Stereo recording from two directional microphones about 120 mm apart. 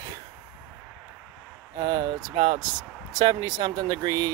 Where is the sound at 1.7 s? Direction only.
40° right (ahead or behind).